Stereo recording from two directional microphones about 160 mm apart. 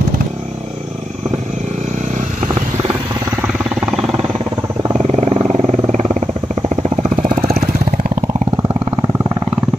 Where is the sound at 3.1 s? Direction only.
20° right (ahead or behind).